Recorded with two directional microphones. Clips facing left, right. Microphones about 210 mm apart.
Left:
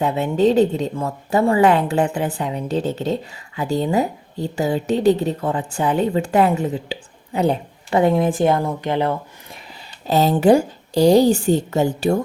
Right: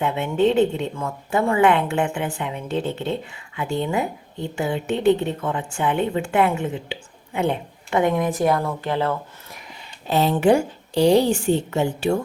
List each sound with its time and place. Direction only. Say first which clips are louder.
0.0 s a woman's voice: left 3 dB; 40° left (ahead or behind); by 9.1 s 20° left (ahead or behind)
10.1 s a woman's voice: left 3 dB; 40° left (ahead or behind)